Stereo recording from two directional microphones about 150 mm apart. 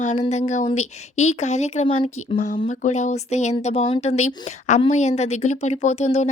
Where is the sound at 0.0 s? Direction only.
50° left (ahead or behind).